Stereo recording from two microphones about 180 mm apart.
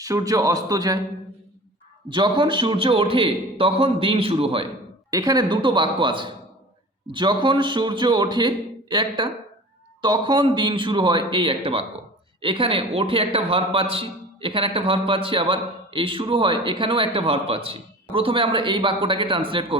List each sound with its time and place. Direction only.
0.0 s a man's voice: 20° right (ahead or behind)
2.0 s a man's voice: 25° right (ahead or behind)
5.1 s a man's voice: 20° right (ahead or behind)